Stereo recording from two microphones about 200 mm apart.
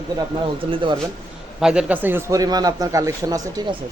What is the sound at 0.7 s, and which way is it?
Speech, 25° right (ahead or behind).